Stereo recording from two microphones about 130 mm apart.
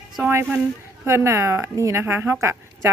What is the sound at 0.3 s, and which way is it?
A woman's voice, 20° right (ahead or behind).